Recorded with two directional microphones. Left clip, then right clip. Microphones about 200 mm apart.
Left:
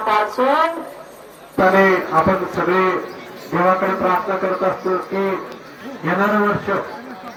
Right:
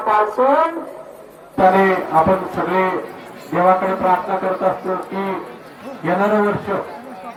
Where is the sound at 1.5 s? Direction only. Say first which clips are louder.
Even; 10° right (ahead or behind).